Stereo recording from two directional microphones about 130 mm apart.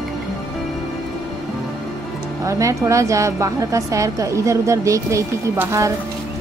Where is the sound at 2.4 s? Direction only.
25° right (ahead or behind).